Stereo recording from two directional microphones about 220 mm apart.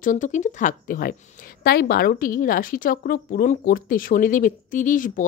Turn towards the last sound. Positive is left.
turn(degrees=35)  # may be behind; listen again after turning